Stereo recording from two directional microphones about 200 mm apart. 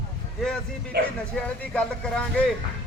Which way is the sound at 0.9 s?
50° right (ahead or behind).